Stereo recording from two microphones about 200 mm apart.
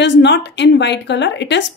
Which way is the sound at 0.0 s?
60° left (ahead or behind).